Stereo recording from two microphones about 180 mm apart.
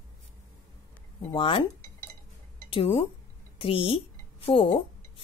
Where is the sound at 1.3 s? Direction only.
30° left (ahead or behind).